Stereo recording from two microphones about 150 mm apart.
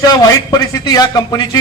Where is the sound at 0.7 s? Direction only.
25° left (ahead or behind).